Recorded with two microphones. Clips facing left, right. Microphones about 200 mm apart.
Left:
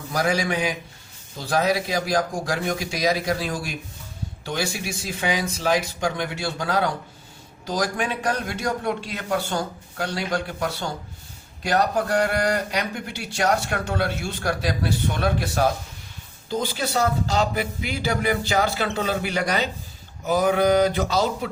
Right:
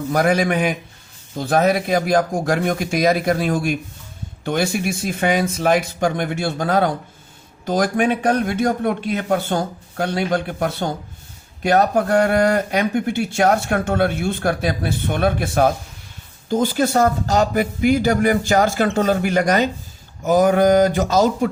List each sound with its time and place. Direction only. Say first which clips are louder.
0.1 s a man's voice: right 5 dB; 55° right (ahead or behind)